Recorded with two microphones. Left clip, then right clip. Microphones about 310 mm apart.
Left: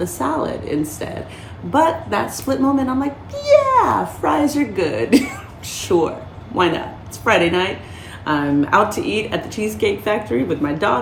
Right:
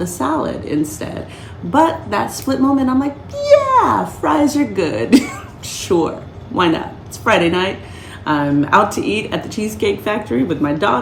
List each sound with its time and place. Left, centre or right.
0.0 s a woman's voice: centre
7.3 s a woman's voice: centre